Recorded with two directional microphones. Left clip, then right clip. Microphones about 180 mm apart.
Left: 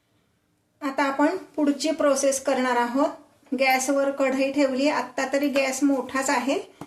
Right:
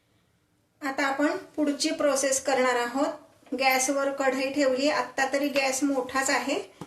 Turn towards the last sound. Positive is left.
turn(degrees=50)  # may be behind; listen again after turning